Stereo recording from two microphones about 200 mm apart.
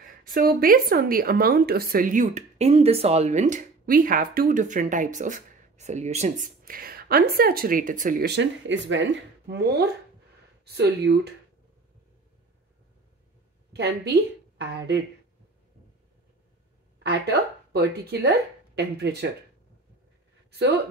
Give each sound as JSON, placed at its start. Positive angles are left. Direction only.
{"t": 0.0, "sound": "speech", "side_deg": -45}
{"t": 8.4, "sound": "speech", "side_deg": -65}
{"t": 9.5, "sound": "speech", "side_deg": -55}
{"t": 13.7, "sound": "speech", "side_deg": -55}
{"t": 17.1, "sound": "a woman's voice", "side_deg": -55}
{"t": 20.5, "sound": "speech", "side_deg": -55}